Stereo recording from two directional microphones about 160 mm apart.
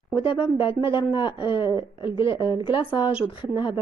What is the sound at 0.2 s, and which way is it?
Speech, 30° left (ahead or behind).